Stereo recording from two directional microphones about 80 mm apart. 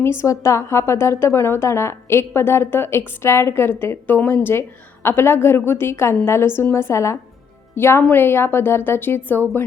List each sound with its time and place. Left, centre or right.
0.0 s a woman's voice: left